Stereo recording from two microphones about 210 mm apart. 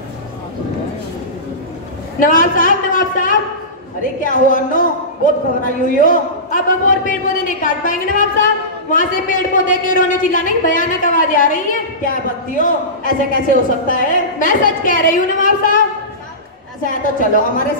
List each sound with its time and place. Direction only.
2.1 s a man's voice: 40° left (ahead or behind)
16.8 s a man's voice: 40° left (ahead or behind)